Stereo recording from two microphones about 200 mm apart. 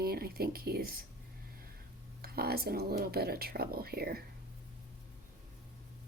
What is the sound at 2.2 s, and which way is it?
Speech, 50° right (ahead or behind).